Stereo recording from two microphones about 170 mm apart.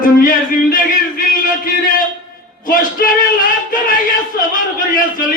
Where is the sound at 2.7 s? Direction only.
55° left (ahead or behind).